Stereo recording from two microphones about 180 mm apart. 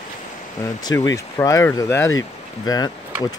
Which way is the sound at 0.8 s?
20° left (ahead or behind).